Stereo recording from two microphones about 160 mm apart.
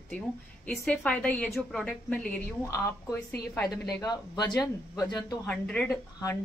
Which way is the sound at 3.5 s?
20° left (ahead or behind).